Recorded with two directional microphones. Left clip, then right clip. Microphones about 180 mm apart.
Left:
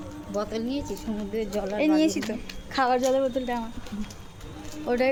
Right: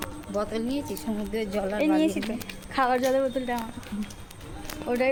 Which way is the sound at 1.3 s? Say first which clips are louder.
Even; 50° right (ahead or behind).